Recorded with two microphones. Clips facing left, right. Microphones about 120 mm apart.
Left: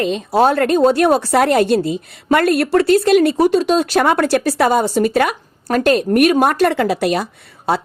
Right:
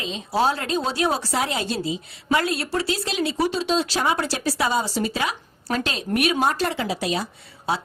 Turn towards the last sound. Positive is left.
turn(degrees=60)  # may be behind; listen again after turning